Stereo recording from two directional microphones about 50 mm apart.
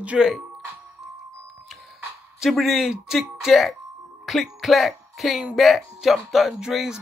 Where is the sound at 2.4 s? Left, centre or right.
Centre.